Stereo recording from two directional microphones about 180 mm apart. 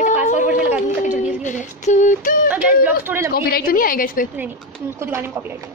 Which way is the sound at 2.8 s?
10° right (ahead or behind).